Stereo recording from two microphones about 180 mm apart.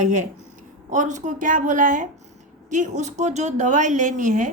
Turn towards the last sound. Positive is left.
turn(degrees=-45)  # may be behind; listen again after turning